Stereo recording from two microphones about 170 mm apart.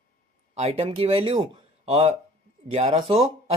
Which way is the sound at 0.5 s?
35° right (ahead or behind).